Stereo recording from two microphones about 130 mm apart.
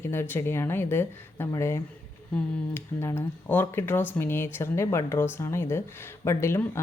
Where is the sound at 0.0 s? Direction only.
20° left (ahead or behind).